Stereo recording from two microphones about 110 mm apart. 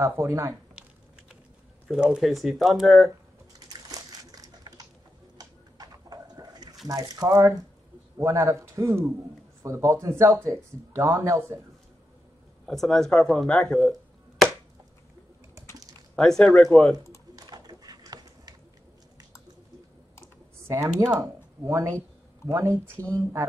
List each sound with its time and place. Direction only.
0.0 s speech: 30° right (ahead or behind)
1.9 s speech: 5° right (ahead or behind)
4.2 s a sound: 35° right (ahead or behind)
6.9 s a man's voice: 35° right (ahead or behind)
12.6 s speech: centre (ahead or behind)
16.2 s speech: 5° left (ahead or behind)
17.4 s a sound: 35° right (ahead or behind)
20.6 s speech: 25° right (ahead or behind)